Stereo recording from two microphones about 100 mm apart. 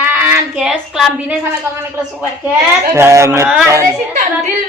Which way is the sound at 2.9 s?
30° right (ahead or behind).